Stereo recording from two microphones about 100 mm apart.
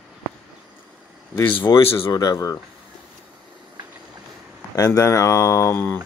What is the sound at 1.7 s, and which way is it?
Speech, 60° left (ahead or behind).